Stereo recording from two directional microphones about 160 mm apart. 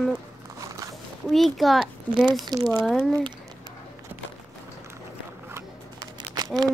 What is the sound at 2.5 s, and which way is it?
Speech, 25° right (ahead or behind).